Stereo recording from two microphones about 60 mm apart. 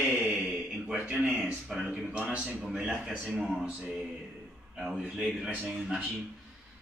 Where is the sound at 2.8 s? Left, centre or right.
Centre.